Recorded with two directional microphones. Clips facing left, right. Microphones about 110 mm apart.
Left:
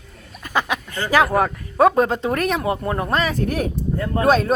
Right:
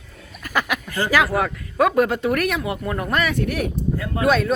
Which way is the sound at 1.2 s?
40° left (ahead or behind).